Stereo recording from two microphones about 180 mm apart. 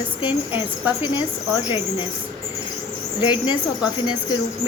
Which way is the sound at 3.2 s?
25° left (ahead or behind).